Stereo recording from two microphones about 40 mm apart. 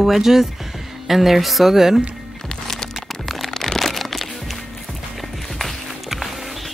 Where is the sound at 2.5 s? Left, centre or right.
Centre.